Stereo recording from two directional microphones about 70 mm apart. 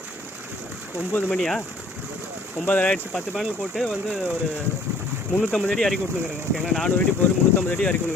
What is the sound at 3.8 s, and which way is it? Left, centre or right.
Speech, centre.